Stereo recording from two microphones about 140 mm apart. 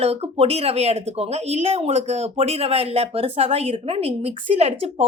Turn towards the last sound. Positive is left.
turn(degrees=-45)  # may be behind; listen again after turning